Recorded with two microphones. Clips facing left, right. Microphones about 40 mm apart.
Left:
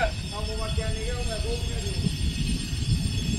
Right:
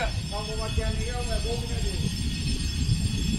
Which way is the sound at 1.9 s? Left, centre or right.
Left.